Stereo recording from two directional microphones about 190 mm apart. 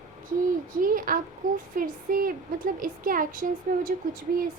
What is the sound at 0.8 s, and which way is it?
A woman's voice, 45° right (ahead or behind).